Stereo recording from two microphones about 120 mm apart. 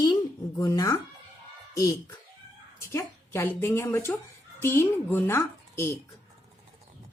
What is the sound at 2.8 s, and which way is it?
A woman's voice, 20° left (ahead or behind).